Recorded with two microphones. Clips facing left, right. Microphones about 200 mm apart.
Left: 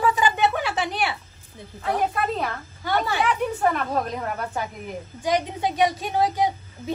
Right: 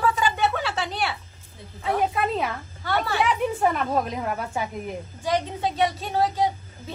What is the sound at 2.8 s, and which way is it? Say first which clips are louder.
Speech: left 1 dB; 15° left (ahead or behind).